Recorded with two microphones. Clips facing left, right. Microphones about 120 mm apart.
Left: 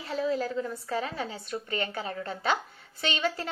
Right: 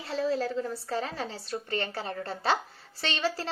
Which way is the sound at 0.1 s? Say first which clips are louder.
Even; 35° right (ahead or behind).